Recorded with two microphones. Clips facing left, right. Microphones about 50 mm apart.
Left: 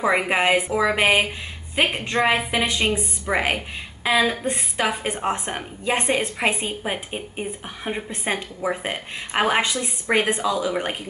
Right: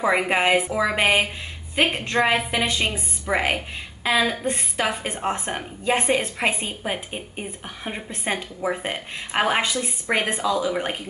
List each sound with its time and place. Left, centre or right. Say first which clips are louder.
0.0 s a woman's voice: even; centre